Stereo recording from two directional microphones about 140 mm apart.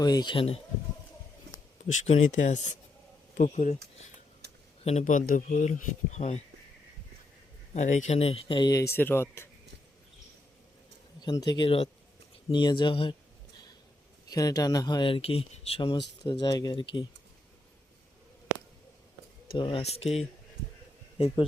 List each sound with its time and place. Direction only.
0.0 s speech: 30° left (ahead or behind)
1.9 s speech: 55° left (ahead or behind)
4.8 s speech: 50° left (ahead or behind)
7.7 s speech: 60° left (ahead or behind); by 8.9 s 30° left (ahead or behind)
9.0 s speech: 15° left (ahead or behind)
11.2 s speech: 30° left (ahead or behind)
14.3 s speech: 25° left (ahead or behind)
19.5 s speech: 40° left (ahead or behind)